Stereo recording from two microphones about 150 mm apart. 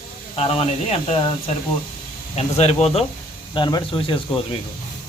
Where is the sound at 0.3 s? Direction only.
45° left (ahead or behind).